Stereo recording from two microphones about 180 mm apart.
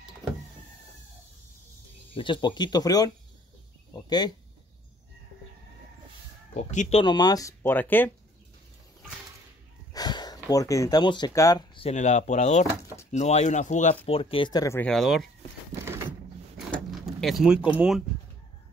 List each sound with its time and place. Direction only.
2.1 s speech: 25° left (ahead or behind)
3.9 s a sound: 25° left (ahead or behind)
6.5 s speech: 40° left (ahead or behind)
7.0 s speech: 25° left (ahead or behind)
9.9 s speech: 20° left (ahead or behind); by 13.9 s 40° left (ahead or behind)
14.0 s speech: 30° left (ahead or behind)
14.9 s speech: centre (ahead or behind)
16.7 s sliding door: centre (ahead or behind)
17.6 s speech: 5° right (ahead or behind)